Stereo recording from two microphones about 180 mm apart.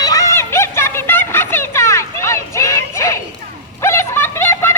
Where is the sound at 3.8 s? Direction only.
15° left (ahead or behind).